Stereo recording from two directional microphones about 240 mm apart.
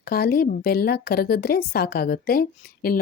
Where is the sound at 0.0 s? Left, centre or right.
Left.